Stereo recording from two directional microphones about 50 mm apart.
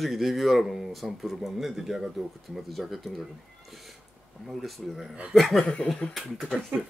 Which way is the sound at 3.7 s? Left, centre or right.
Centre.